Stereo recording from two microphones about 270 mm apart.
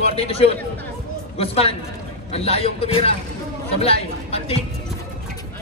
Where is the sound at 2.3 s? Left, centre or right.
Left.